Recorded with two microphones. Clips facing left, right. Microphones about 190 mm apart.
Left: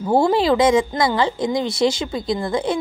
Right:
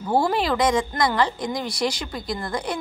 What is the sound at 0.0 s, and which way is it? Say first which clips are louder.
Speech: left 5 dB; 25° left (ahead or behind).